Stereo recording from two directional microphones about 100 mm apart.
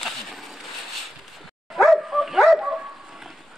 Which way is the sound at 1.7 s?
Centre (ahead or behind).